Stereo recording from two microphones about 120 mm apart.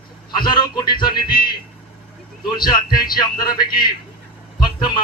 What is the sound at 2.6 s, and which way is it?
Speech, 35° left (ahead or behind).